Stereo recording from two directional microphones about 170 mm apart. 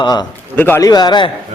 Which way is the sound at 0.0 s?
25° left (ahead or behind).